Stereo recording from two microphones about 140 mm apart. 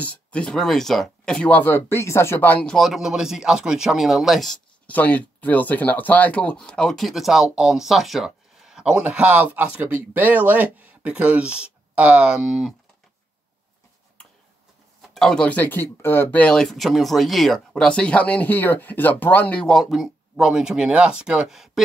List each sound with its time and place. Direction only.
0.0 s speech: 10° left (ahead or behind)
15.0 s speech: 5° left (ahead or behind)